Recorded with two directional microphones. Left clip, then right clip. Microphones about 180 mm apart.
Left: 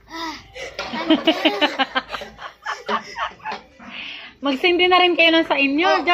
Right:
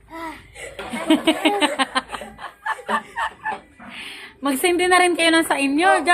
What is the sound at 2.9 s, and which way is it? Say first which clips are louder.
Turkey: even; 15° right (ahead or behind).